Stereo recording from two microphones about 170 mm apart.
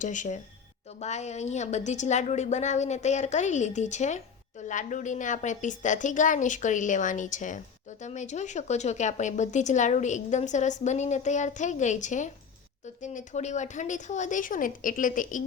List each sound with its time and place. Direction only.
0.0 s a woman's voice: 45° left (ahead or behind)